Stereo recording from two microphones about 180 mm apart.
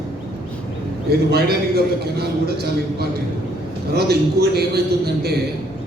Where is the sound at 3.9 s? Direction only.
60° right (ahead or behind).